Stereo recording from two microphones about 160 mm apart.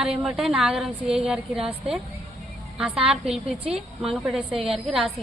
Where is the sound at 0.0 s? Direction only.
5° right (ahead or behind).